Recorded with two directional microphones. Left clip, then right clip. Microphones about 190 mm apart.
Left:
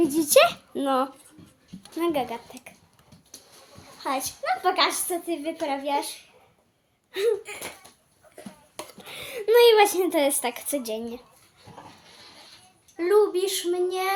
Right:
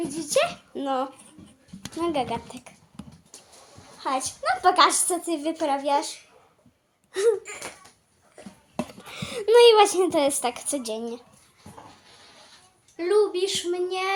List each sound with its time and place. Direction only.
0.1 s a child's voice: 60° left (ahead or behind)
0.7 s speech: 25° left (ahead or behind)
2.0 s a child's voice: 5° left (ahead or behind)
2.3 s speech: 15° right (ahead or behind)
4.0 s a woman's voice: 5° right (ahead or behind)
4.6 s a woman's voice: 35° right (ahead or behind)
9.3 s a woman's voice: 10° right (ahead or behind)
13.0 s a woman's voice: centre (ahead or behind)